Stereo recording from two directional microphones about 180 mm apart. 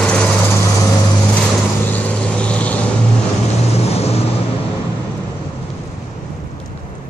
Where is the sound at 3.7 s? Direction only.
35° left (ahead or behind).